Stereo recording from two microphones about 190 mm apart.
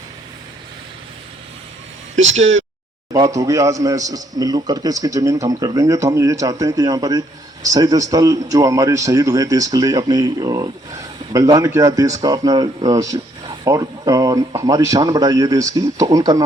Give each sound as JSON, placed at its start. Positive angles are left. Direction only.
{"t": 2.3, "sound": "speech", "side_deg": -35}
{"t": 3.1, "sound": "a man's voice", "side_deg": -20}